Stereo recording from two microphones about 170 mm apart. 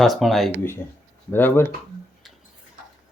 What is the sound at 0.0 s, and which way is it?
Speech, centre (ahead or behind).